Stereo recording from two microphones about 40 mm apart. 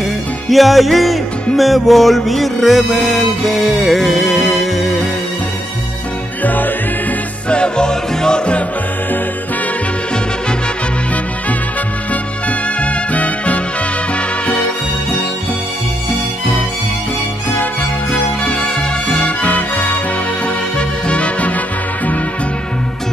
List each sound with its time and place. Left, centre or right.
0.5 s music: centre
6.4 s music: left
7.4 s music: left
12.1 s music: left
18.1 s music: left
20.4 s music: left